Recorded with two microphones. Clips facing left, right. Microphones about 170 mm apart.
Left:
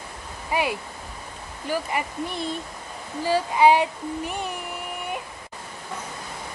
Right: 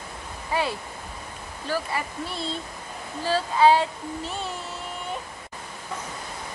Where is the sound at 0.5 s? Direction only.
15° left (ahead or behind).